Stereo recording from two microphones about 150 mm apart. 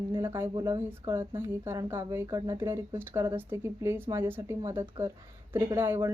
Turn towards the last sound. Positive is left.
turn(degrees=-15)  # may be behind; listen again after turning